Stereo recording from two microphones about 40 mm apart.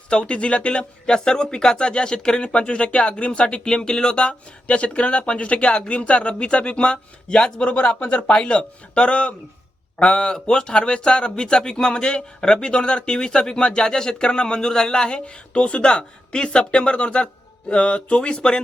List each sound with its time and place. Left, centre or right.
0.1 s speech: left